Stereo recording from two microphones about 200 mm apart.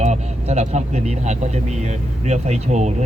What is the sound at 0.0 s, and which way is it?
Speech, 35° right (ahead or behind).